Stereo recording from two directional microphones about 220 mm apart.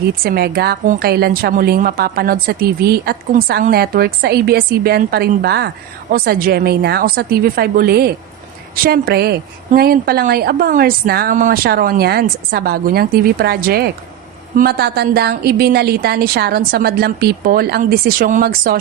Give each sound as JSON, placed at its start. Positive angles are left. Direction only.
{"t": 0.3, "sound": "a woman's voice", "side_deg": -45}